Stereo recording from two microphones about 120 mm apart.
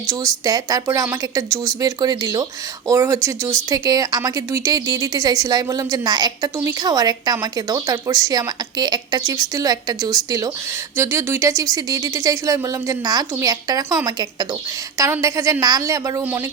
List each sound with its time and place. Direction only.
0.1 s a woman's voice: 30° right (ahead or behind)